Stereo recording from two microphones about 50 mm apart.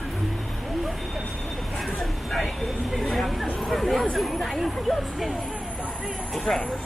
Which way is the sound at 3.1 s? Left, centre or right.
Centre.